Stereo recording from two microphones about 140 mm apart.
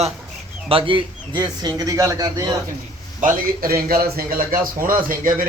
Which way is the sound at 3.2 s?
90° right.